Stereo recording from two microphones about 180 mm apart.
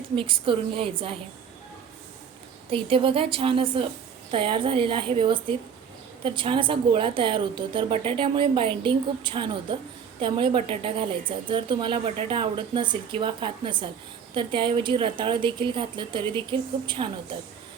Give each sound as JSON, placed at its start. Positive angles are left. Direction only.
{"t": 0.2, "sound": "a woman's voice", "side_deg": -30}
{"t": 2.6, "sound": "a woman's voice", "side_deg": -30}